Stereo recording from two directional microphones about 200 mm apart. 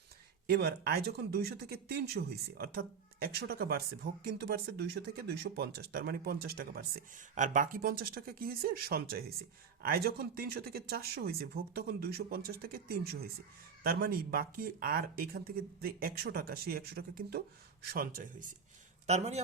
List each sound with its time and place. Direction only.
0.5 s a man's voice: 50° right (ahead or behind); by 19.4 s 35° right (ahead or behind)